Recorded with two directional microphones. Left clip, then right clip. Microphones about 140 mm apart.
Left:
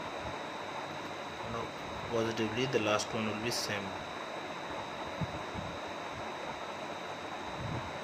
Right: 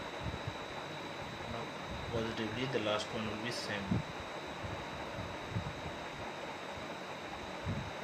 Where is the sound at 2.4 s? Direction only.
35° left (ahead or behind).